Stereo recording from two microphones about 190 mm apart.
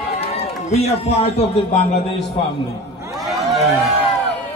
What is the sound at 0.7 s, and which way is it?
Speech, 35° left (ahead or behind).